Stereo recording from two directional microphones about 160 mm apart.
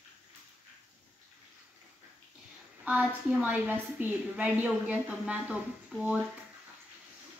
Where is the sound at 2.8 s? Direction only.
10° right (ahead or behind).